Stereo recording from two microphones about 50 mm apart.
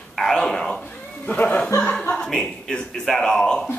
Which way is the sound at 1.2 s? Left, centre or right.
Left.